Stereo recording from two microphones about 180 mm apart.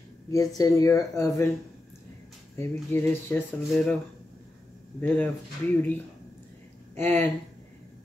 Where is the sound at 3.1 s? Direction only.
10° left (ahead or behind).